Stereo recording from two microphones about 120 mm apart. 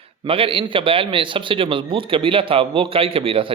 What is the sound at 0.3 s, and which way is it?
Speech, 50° right (ahead or behind).